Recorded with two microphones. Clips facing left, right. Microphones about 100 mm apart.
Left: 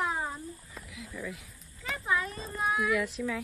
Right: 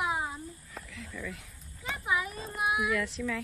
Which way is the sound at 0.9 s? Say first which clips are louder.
Left 2 dB; 5° left (ahead or behind).